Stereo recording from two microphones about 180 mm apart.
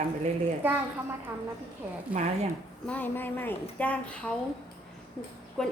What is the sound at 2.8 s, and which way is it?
Speech, 10° left (ahead or behind).